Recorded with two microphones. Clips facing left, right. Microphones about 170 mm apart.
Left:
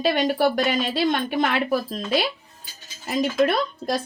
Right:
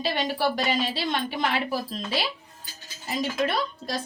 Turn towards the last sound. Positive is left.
turn(degrees=55)  # may be behind; listen again after turning